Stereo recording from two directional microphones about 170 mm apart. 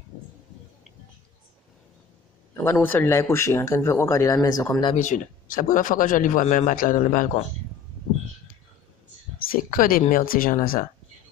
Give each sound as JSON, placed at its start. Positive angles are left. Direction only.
{"t": 2.5, "sound": "a man's voice", "side_deg": 15}
{"t": 4.9, "sound": "speech", "side_deg": 45}
{"t": 9.5, "sound": "speech", "side_deg": 55}